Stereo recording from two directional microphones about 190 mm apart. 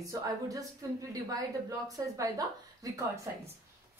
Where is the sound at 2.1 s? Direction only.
20° right (ahead or behind).